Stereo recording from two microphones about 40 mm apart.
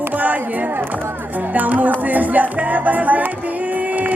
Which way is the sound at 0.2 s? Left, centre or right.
Right.